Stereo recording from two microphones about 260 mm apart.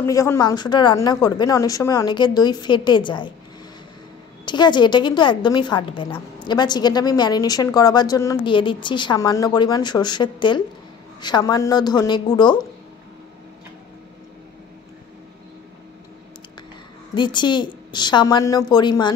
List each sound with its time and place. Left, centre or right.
0.0 s a woman's voice: centre
4.5 s a woman's voice: centre
17.1 s a woman's voice: centre